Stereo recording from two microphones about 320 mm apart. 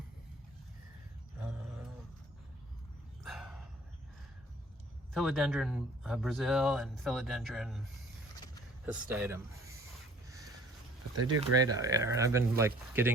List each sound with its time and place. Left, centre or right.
1.4 s roaring cats: centre
3.2 s dog: centre
5.1 s speech: centre
8.9 s speech: centre
10.2 s a sound: centre
11.1 s speech: right
11.6 s speech: centre